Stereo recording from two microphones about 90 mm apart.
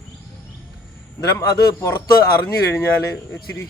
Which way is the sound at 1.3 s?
30° left (ahead or behind).